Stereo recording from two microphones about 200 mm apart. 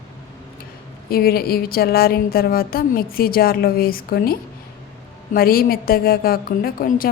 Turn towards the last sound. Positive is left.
turn(degrees=45)  # may be behind; listen again after turning